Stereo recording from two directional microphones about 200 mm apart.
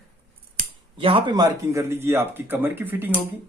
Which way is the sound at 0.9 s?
25° right (ahead or behind).